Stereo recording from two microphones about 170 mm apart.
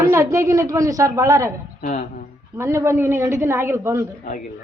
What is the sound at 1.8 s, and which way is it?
Speech, 50° left (ahead or behind).